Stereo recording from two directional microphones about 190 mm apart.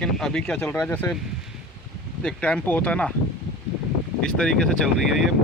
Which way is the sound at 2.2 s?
5° left (ahead or behind).